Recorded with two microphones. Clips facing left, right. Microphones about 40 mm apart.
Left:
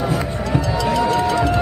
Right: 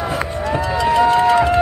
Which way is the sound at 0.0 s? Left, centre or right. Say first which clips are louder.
Right 1 dB; right.